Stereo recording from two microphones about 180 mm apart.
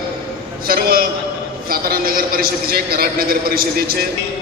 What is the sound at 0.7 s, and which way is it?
A man's voice, 55° right (ahead or behind).